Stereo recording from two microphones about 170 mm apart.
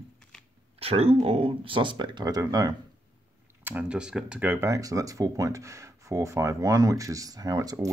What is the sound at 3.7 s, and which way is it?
Speech, 5° right (ahead or behind).